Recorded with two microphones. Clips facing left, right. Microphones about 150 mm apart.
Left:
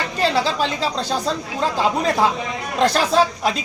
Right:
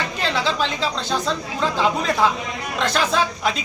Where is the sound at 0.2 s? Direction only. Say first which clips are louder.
Left 4 dB; 40° left (ahead or behind).